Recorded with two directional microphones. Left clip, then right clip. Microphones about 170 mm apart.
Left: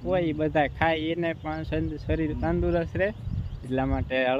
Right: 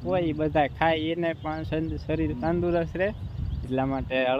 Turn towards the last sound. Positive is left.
turn(degrees=0)  # may be behind; listen again after turning